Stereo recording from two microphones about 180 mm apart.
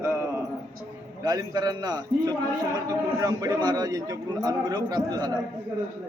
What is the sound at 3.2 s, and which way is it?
A man's voice, 20° right (ahead or behind).